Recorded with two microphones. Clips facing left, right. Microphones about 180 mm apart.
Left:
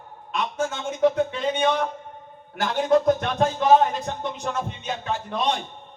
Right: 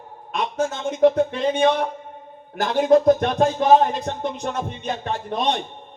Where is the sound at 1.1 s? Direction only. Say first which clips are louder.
Right 3 dB; 35° right (ahead or behind).